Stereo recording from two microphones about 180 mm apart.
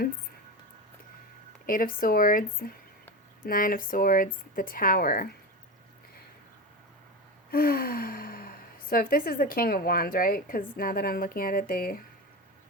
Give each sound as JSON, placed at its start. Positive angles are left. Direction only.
{"t": 1.6, "sound": "speech", "side_deg": 50}
{"t": 7.5, "sound": "speech", "side_deg": 55}